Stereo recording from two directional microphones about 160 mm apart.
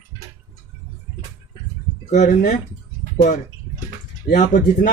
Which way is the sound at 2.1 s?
50° left (ahead or behind).